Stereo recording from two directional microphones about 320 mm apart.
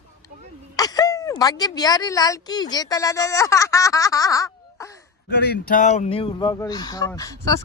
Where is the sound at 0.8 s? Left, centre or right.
Centre.